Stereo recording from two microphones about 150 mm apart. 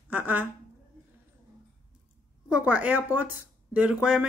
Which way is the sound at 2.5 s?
10° right (ahead or behind).